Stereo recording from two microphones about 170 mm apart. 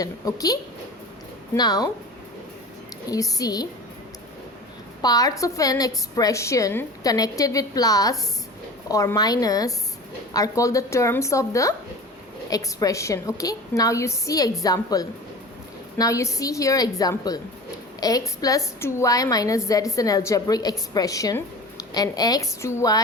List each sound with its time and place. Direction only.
0.0 s a woman's voice: 20° left (ahead or behind)
3.1 s a woman's voice: 20° left (ahead or behind)
5.0 s a woman's voice: 20° left (ahead or behind)